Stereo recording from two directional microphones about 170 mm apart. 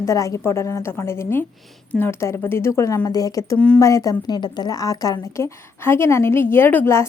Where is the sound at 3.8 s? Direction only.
20° left (ahead or behind).